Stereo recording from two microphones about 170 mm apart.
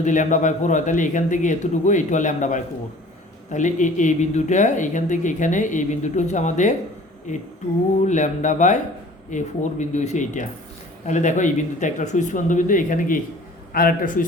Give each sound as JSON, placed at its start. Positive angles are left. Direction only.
{"t": 0.0, "sound": "speech", "side_deg": 45}
{"t": 8.0, "sound": "speech", "side_deg": 45}